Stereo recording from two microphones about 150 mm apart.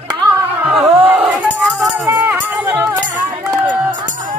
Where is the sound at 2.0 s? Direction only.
15° right (ahead or behind).